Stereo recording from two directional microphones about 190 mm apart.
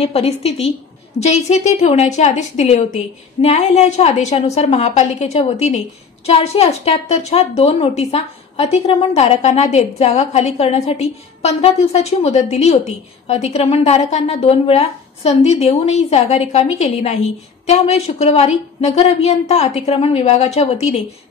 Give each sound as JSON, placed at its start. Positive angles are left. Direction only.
{"t": 0.0, "sound": "a woman's voice", "side_deg": 30}